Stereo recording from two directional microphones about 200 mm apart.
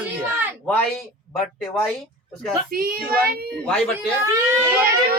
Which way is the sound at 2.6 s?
45° right (ahead or behind).